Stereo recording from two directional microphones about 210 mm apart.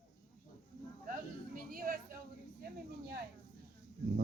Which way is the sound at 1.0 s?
40° right (ahead or behind).